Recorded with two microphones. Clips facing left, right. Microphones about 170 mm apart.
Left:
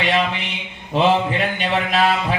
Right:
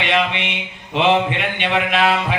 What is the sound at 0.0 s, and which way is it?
Speech, 40° left (ahead or behind).